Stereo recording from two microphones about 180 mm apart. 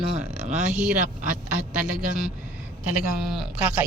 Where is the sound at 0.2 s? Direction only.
40° right (ahead or behind).